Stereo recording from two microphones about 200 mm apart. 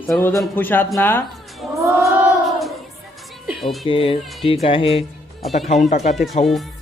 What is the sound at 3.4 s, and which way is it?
Music, centre (ahead or behind).